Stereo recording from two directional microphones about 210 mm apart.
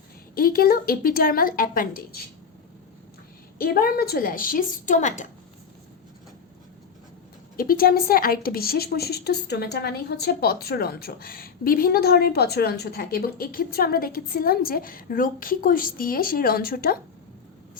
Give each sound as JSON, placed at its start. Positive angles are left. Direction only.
{"t": 0.3, "sound": "a woman's voice", "side_deg": 45}
{"t": 3.6, "sound": "a woman's voice", "side_deg": 45}
{"t": 7.5, "sound": "a woman's voice", "side_deg": 45}